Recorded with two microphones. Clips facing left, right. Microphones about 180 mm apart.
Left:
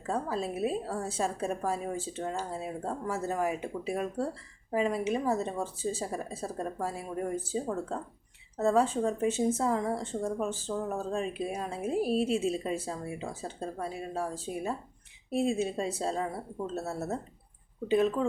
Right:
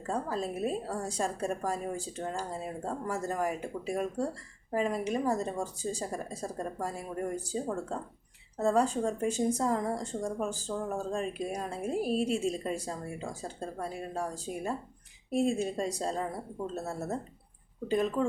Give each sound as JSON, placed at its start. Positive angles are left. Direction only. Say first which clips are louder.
{"t": 0.0, "sound": "a woman's voice", "louder": "left 1 dB", "side_deg": 5}